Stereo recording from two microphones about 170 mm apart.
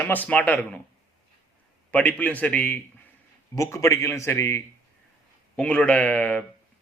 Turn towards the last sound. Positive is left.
turn(degrees=10)  # may be behind; listen again after turning